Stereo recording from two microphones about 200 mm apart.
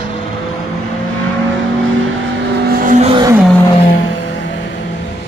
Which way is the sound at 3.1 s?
20° right (ahead or behind).